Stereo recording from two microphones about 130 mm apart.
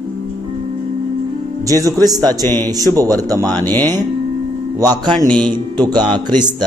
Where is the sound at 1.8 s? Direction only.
30° right (ahead or behind).